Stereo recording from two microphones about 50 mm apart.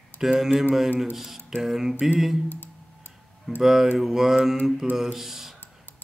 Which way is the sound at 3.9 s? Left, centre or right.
Centre.